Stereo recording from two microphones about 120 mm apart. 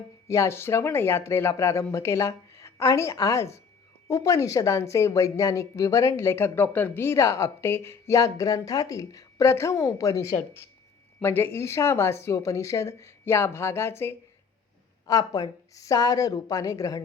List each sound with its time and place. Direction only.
0.3 s speech: 20° left (ahead or behind)
15.0 s a woman's voice: 30° left (ahead or behind)